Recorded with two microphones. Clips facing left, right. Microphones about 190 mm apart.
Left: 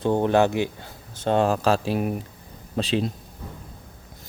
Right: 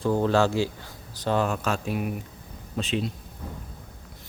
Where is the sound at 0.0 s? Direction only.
20° left (ahead or behind).